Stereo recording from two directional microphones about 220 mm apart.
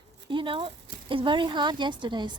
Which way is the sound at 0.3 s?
25° right (ahead or behind).